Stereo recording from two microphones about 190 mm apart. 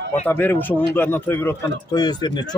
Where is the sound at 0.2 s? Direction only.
10° left (ahead or behind).